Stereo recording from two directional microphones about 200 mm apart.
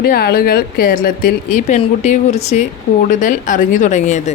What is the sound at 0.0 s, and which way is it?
Speech, 50° left (ahead or behind).